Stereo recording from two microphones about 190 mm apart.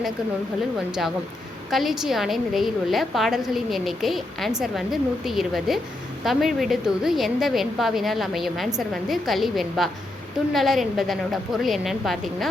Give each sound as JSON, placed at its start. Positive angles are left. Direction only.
{"t": 0.9, "sound": "a woman's voice", "side_deg": -5}